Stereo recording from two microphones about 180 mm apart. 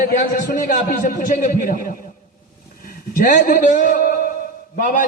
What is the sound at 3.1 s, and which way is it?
A man's voice, 50° left (ahead or behind).